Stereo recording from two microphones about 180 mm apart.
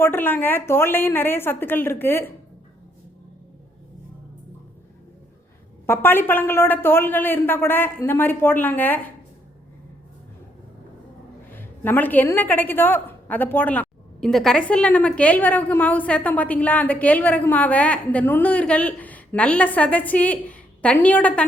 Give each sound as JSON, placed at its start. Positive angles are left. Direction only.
{"t": 0.0, "sound": "a woman's voice", "side_deg": 10}
{"t": 5.8, "sound": "a woman's voice", "side_deg": 10}
{"t": 11.5, "sound": "a woman's voice", "side_deg": 10}